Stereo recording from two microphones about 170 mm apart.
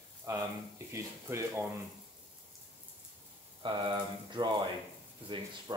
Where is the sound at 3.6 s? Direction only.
25° right (ahead or behind).